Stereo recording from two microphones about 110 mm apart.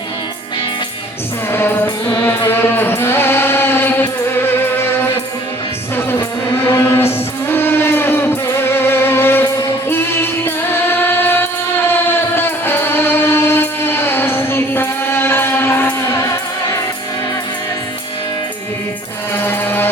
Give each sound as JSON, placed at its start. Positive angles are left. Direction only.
{"t": 1.5, "sound": "music", "side_deg": 20}
{"t": 2.5, "sound": "chant", "side_deg": 20}
{"t": 6.7, "sound": "music", "side_deg": 20}
{"t": 19.4, "sound": "music", "side_deg": 20}